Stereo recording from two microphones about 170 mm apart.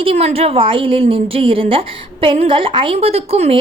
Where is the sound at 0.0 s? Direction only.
35° right (ahead or behind).